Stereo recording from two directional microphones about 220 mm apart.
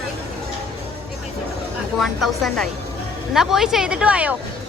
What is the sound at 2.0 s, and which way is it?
A woman's voice, centre (ahead or behind).